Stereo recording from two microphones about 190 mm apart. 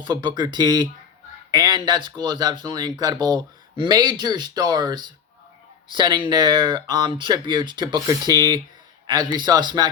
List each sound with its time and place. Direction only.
0.0 s speech: 25° right (ahead or behind)